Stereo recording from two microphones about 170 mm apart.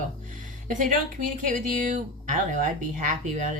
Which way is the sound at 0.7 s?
50° right (ahead or behind).